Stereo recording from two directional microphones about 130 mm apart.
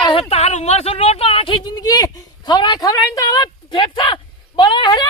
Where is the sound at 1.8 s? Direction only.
30° left (ahead or behind).